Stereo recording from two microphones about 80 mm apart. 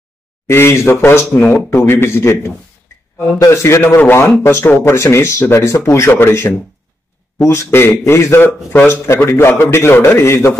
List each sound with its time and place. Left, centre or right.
0.5 s speech: left
3.8 s speech: left